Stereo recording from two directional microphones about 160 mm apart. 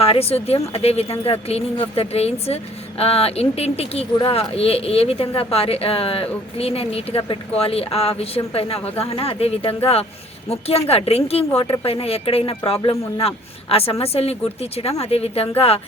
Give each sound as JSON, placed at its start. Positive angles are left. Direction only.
{"t": 0.0, "sound": "speech", "side_deg": 40}